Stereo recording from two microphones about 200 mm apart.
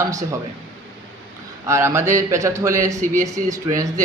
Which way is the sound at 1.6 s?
15° right (ahead or behind).